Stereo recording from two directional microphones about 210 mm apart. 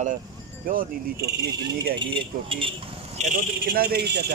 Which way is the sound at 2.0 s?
25° right (ahead or behind).